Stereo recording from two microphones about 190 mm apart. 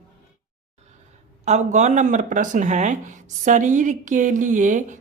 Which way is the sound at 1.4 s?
40° right (ahead or behind).